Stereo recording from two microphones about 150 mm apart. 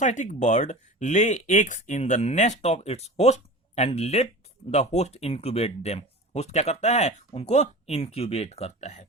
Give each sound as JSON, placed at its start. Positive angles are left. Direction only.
{"t": 0.0, "sound": "speech", "side_deg": 55}